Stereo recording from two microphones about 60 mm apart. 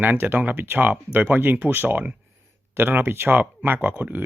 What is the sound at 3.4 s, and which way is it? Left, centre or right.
Speech, right.